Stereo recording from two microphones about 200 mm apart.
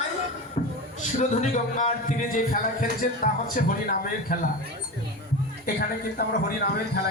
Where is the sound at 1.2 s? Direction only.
40° left (ahead or behind).